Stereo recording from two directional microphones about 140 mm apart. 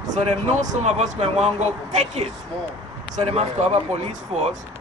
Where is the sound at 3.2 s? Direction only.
50° right (ahead or behind).